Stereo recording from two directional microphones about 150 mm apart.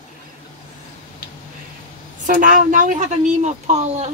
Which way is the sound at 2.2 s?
60° right (ahead or behind).